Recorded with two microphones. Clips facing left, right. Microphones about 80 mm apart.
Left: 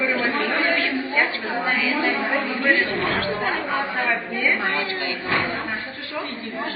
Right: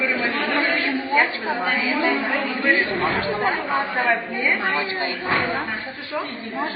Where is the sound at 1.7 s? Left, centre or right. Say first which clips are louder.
Even; right.